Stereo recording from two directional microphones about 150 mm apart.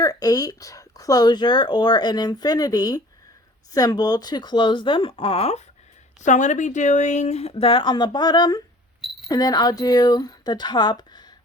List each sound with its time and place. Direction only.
0.0 s speech: 25° left (ahead or behind); by 5.6 s 45° left (ahead or behind)
6.2 s speech: 55° left (ahead or behind); by 11.3 s 30° left (ahead or behind)